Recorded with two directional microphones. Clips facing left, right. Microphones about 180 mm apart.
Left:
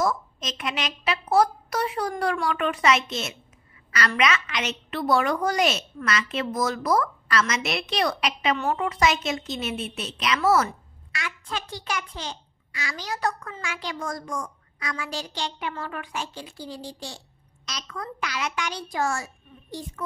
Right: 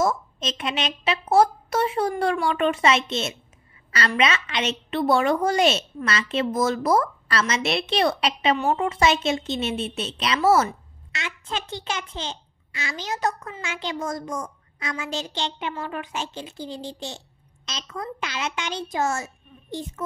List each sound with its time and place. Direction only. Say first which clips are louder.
0.0 s a woman's voice: right 2 dB; 25° right (ahead or behind)